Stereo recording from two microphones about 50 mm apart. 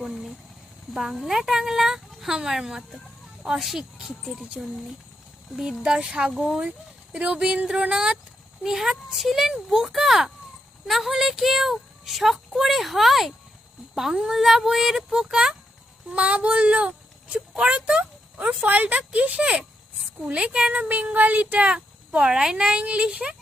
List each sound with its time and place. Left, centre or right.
0.1 s a sound: centre
0.9 s a child's voice: centre
18.6 s speech: right; by 20.7 s centre
20.7 s speech: right